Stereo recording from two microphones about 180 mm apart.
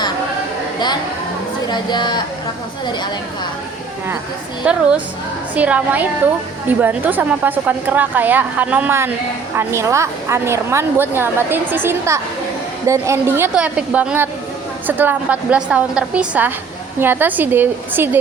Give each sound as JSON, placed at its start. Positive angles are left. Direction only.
{"t": 1.7, "sound": "speech", "side_deg": 25}
{"t": 4.6, "sound": "a woman's voice", "side_deg": -5}